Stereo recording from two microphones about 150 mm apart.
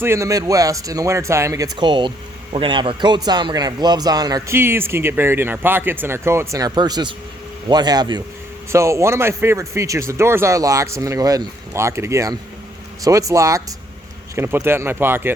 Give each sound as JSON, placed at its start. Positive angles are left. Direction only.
{"t": 0.0, "sound": "speech", "side_deg": -20}